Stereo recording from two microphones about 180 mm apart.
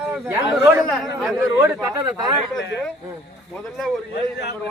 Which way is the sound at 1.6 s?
15° right (ahead or behind).